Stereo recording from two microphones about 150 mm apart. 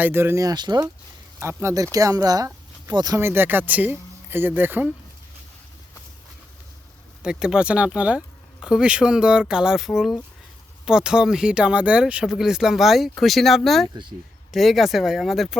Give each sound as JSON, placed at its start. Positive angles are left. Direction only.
{"t": 0.0, "sound": "speech", "side_deg": -15}
{"t": 7.2, "sound": "speech", "side_deg": -5}